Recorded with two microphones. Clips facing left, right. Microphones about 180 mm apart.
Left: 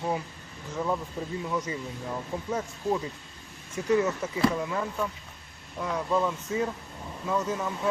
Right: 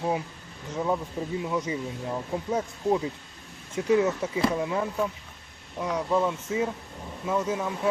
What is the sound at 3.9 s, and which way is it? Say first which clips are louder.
Speech: right 2 dB; 15° right (ahead or behind).